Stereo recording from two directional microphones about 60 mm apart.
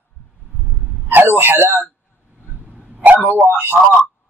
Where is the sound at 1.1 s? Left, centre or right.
Right.